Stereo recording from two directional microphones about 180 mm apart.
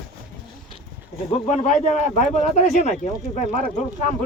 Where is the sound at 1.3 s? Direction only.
40° left (ahead or behind).